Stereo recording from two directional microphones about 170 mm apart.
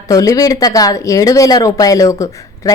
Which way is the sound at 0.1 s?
20° left (ahead or behind).